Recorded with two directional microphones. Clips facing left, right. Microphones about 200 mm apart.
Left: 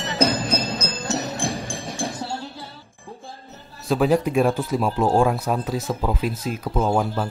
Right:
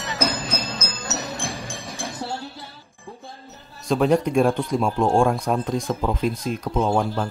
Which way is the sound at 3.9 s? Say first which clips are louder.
Even; 5° left (ahead or behind).